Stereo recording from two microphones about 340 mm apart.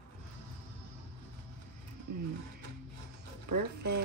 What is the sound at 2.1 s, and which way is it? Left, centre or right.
Music, right.